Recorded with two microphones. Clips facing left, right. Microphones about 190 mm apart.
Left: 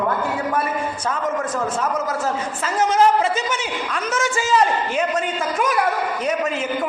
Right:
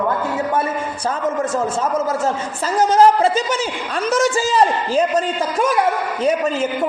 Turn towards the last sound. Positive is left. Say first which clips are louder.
# right 2 dB
turn(degrees=-35)  # may be behind; listen again after turning